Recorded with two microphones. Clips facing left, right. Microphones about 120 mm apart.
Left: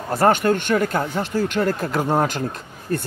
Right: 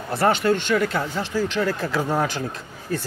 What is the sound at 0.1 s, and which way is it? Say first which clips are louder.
Speech: left 2 dB; 45° left (ahead or behind).